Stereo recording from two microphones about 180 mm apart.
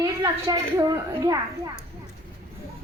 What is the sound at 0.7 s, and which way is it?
Speech, 20° right (ahead or behind).